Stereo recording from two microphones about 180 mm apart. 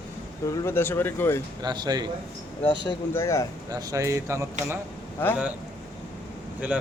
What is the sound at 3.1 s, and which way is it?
Speech, 15° left (ahead or behind).